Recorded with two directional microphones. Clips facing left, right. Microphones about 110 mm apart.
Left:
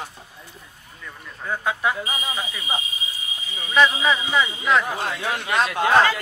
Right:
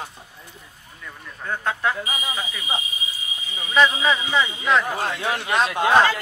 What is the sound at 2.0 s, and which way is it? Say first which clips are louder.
Speech: even; 30° left (ahead or behind).